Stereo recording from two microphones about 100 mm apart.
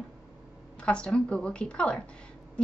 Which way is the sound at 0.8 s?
10° left (ahead or behind).